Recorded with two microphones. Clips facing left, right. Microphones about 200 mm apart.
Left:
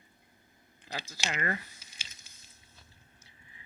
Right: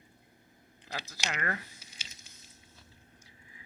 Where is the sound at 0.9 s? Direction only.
15° left (ahead or behind).